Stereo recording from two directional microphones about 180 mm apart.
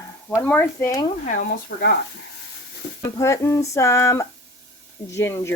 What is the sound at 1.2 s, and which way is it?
Speech, 50° left (ahead or behind).